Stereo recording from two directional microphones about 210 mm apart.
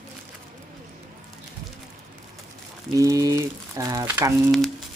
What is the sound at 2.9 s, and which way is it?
Speech, 15° right (ahead or behind).